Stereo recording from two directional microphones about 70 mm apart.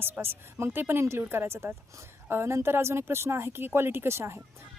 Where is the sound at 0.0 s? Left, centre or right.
Right.